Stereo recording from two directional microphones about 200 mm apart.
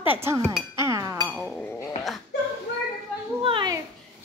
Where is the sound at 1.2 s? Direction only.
Centre (ahead or behind).